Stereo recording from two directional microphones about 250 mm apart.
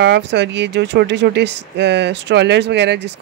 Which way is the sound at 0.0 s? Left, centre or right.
Right.